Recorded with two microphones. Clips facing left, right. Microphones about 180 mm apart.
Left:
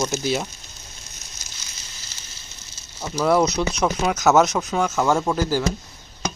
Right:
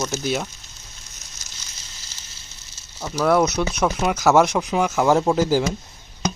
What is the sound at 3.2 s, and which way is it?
Speech, 5° right (ahead or behind).